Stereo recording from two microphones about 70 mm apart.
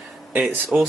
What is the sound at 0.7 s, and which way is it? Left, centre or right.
Speech, right.